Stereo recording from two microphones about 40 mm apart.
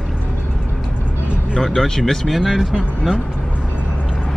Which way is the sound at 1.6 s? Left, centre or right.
Centre.